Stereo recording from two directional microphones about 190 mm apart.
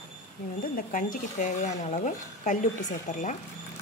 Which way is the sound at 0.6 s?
45° left (ahead or behind).